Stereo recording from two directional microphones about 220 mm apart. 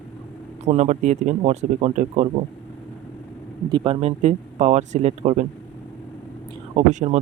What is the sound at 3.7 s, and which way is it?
Speech, 25° right (ahead or behind).